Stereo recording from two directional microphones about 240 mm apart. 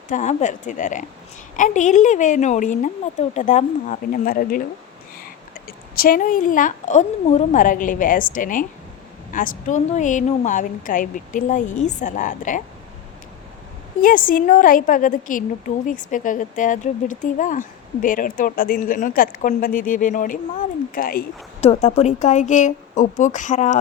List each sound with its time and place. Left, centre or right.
0.1 s a woman's voice: left
5.6 s a woman's voice: left
14.0 s a woman's voice: left